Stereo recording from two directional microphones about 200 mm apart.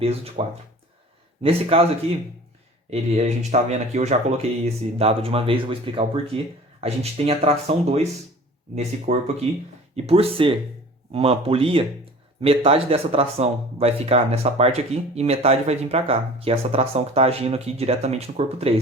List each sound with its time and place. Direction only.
0.0 s a man's voice: 30° right (ahead or behind)